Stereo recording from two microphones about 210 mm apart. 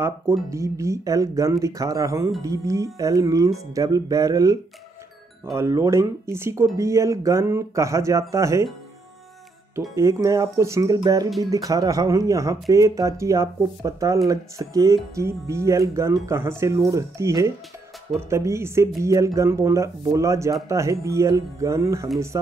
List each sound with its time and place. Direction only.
0.0 s speech: 15° right (ahead or behind)
9.8 s speech: 15° right (ahead or behind)